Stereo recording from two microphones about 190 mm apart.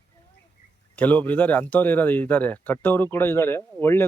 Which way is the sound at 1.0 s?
10° left (ahead or behind).